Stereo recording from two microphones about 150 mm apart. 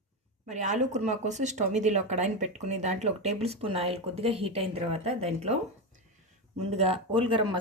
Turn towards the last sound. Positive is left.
turn(degrees=-35)  # may be behind; listen again after turning